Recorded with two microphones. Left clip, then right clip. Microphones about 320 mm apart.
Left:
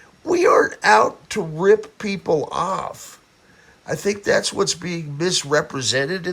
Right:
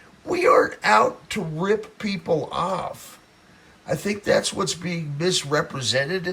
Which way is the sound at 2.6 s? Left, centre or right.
Centre.